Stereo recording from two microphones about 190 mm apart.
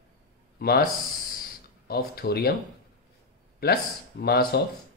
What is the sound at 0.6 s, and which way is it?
Speech, 55° left (ahead or behind).